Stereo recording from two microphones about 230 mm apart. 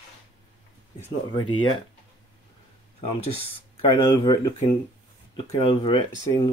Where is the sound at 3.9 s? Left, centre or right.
Centre.